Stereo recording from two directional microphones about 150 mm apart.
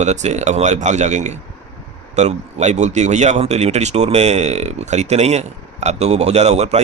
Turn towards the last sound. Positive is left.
turn(degrees=-45)  # may be behind; listen again after turning